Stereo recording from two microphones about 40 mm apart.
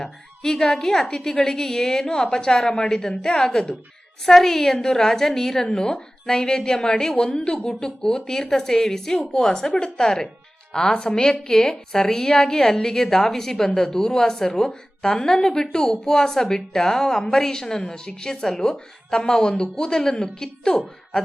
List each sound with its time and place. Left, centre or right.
0.0 s a woman's voice: centre
4.3 s speech: centre
7.6 s speech: centre
10.7 s a woman's voice: left
11.0 s speech: centre